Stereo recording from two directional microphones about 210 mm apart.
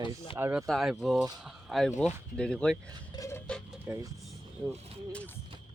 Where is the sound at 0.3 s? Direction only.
10° right (ahead or behind).